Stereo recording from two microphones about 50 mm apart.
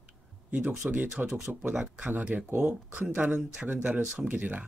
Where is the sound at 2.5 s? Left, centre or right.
Right.